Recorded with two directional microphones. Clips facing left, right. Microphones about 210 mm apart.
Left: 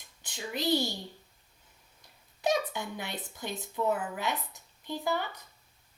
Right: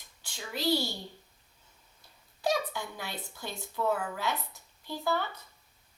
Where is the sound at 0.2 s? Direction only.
20° left (ahead or behind).